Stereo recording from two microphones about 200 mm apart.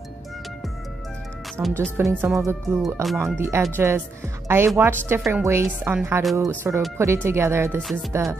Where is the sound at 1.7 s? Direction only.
10° right (ahead or behind).